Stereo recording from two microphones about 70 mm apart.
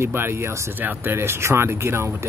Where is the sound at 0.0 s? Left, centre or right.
Right.